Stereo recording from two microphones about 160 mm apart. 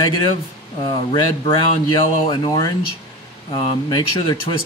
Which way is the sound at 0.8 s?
30° left (ahead or behind).